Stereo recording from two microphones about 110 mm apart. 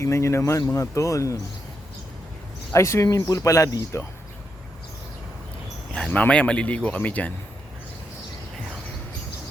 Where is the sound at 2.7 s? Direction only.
25° left (ahead or behind).